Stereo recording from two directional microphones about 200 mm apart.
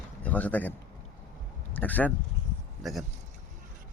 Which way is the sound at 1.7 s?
10° left (ahead or behind).